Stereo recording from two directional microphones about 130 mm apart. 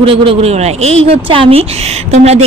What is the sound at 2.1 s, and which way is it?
Speech, 55° right (ahead or behind).